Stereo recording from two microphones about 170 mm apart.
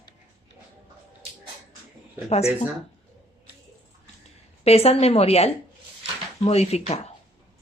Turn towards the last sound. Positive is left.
turn(degrees=40)  # may be behind; listen again after turning